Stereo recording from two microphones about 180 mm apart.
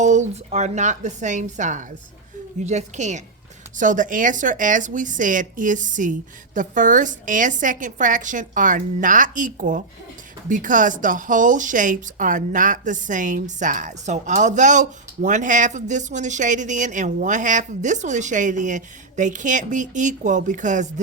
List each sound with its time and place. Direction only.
0.0 s a woman's voice: 40° right (ahead or behind)